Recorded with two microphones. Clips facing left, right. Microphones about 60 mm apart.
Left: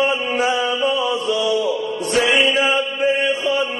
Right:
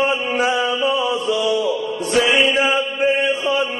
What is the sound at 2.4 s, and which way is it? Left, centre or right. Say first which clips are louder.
Chant: even; right.